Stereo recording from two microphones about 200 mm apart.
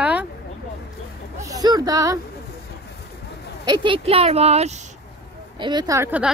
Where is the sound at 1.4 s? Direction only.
20° right (ahead or behind).